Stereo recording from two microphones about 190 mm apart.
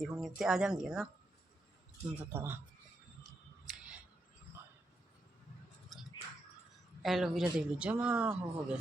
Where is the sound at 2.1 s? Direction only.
10° right (ahead or behind).